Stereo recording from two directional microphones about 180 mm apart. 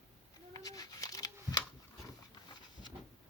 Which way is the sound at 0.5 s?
20° left (ahead or behind).